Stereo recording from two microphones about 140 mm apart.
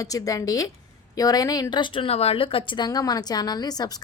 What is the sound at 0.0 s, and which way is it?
Speech, 25° left (ahead or behind).